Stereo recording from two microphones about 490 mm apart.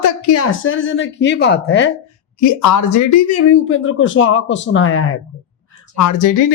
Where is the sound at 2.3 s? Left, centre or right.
Left.